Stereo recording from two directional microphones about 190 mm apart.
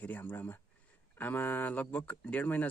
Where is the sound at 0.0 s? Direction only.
10° left (ahead or behind).